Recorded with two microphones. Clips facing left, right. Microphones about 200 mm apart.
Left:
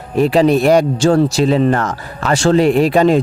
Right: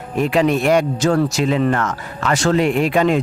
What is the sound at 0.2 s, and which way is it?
Speech, 35° left (ahead or behind).